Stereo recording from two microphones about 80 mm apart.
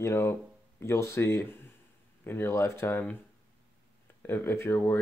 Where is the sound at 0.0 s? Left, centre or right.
Left.